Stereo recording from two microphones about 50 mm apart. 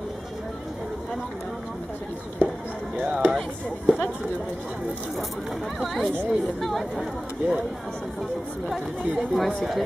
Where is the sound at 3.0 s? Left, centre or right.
Centre.